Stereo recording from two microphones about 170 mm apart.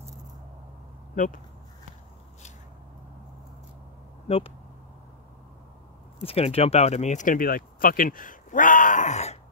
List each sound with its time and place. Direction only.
1.1 s speech: 50° left (ahead or behind)
4.3 s speech: 40° left (ahead or behind)
6.2 s speech: 35° left (ahead or behind)